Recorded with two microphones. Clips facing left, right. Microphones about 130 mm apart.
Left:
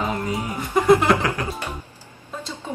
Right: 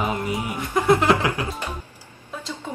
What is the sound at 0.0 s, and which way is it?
Music, 20° right (ahead or behind).